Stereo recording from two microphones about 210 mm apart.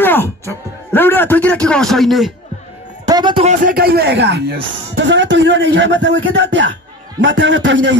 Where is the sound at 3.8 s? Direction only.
50° right (ahead or behind).